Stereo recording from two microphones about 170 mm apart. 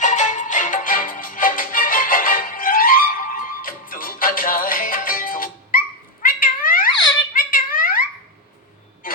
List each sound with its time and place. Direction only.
0.0 s music: 45° left (ahead or behind)
6.2 s cat: 55° left (ahead or behind)
7.3 s a sound: 55° left (ahead or behind)